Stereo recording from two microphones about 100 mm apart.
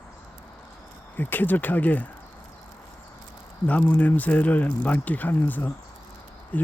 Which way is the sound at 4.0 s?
15° left (ahead or behind).